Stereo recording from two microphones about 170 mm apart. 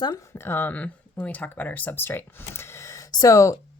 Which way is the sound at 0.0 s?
20° left (ahead or behind).